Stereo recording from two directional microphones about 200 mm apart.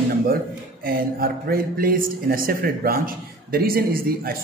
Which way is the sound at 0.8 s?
50° right (ahead or behind).